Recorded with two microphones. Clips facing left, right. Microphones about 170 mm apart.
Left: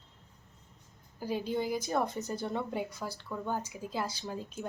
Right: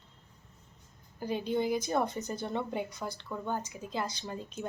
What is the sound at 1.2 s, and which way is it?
A woman's voice, 5° left (ahead or behind).